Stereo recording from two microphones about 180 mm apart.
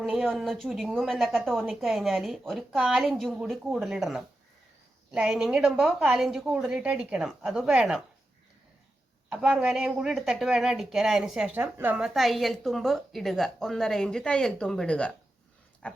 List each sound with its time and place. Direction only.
0.0 s speech: centre (ahead or behind)
9.3 s speech: 5° right (ahead or behind)
15.8 s dog: 5° left (ahead or behind)